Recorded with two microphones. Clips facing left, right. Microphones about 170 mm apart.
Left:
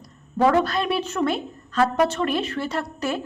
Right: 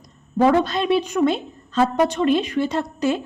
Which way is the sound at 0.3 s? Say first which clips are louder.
Right 2 dB; 20° right (ahead or behind).